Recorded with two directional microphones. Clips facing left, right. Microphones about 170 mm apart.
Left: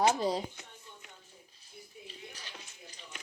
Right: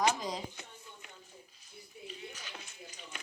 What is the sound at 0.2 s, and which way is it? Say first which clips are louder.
Speech: left 7 dB; 30° left (ahead or behind).